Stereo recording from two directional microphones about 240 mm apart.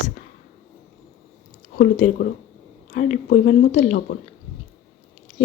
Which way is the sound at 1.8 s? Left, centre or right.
Left.